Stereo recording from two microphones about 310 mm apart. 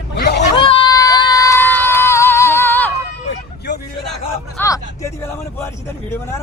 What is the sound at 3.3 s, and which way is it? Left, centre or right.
Vehicle, left.